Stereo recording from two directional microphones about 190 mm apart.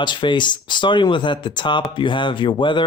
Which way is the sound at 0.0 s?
25° left (ahead or behind).